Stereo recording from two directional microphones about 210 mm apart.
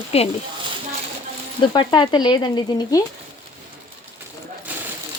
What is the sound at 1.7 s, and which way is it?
Speech, 20° left (ahead or behind).